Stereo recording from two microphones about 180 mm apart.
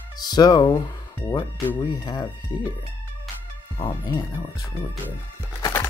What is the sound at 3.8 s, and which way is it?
Speech, 25° left (ahead or behind).